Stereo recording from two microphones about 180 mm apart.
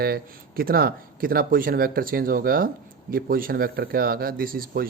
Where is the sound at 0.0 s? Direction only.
55° right (ahead or behind).